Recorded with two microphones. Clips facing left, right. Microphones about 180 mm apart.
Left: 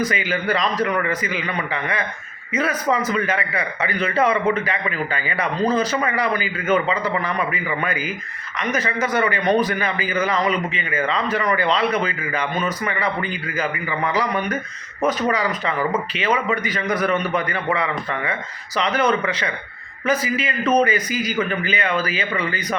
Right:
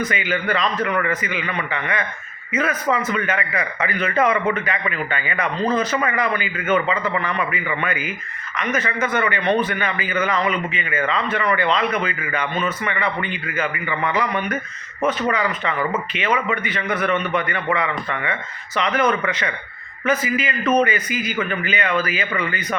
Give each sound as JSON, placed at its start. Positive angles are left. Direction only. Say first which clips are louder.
{"t": 0.0, "sound": "a man's voice", "louder": "left 1 dB", "side_deg": 35}